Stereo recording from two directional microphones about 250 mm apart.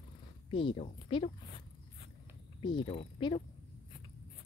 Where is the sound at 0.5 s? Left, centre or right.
Left.